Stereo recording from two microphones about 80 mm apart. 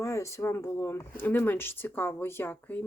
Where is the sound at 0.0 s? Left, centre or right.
Left.